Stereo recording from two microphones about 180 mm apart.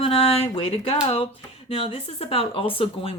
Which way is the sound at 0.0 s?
30° left (ahead or behind).